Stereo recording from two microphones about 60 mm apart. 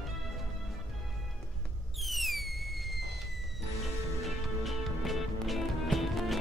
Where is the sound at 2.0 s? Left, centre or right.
Centre.